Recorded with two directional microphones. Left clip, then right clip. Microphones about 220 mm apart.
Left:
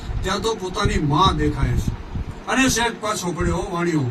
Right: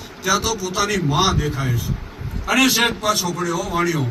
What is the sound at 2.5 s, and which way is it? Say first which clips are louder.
Speech: right 3 dB; 5° right (ahead or behind).